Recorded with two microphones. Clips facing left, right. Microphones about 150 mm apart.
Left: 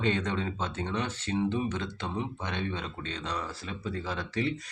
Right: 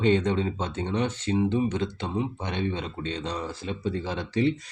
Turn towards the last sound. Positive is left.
turn(degrees=-25)  # may be behind; listen again after turning